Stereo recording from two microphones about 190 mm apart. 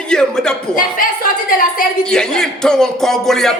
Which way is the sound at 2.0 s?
5° left (ahead or behind).